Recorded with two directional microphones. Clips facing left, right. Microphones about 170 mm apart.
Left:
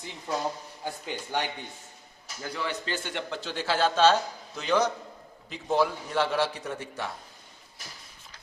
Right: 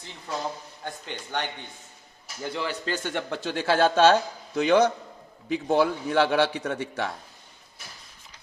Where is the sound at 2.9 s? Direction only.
50° right (ahead or behind); by 7.1 s 70° right (ahead or behind).